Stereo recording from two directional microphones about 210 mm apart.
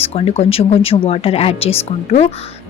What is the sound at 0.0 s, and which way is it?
A woman's voice, 30° left (ahead or behind).